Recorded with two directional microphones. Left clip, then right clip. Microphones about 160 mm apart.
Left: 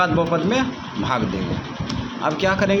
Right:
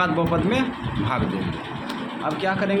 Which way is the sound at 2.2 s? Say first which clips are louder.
Left 5 dB; 30° left (ahead or behind).